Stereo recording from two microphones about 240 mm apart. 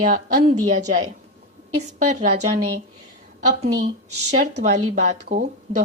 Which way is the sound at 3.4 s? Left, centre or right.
Right.